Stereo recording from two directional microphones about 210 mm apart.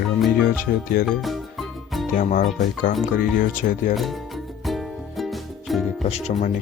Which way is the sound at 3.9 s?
Centre (ahead or behind).